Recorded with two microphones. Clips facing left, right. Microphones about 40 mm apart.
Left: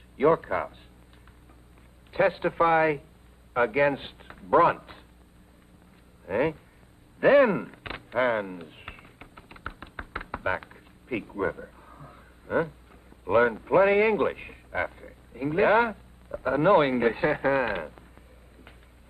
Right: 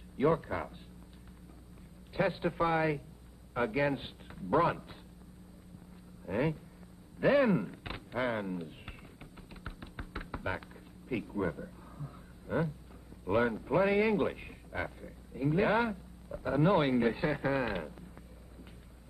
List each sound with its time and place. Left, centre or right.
0.2 s a man's voice: left
2.1 s a man's voice: left
6.2 s a man's voice: left
7.2 s a sound: left
13.2 s a man's voice: left